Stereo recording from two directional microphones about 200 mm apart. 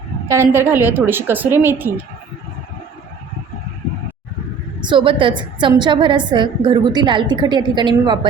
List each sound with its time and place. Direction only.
0.3 s a woman's voice: 10° right (ahead or behind)
4.8 s a woman's voice: 25° right (ahead or behind)